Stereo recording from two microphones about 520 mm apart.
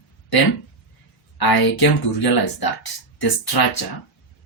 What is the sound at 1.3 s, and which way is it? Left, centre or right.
Speech, left.